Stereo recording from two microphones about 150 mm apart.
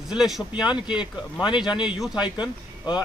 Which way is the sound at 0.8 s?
30° left (ahead or behind).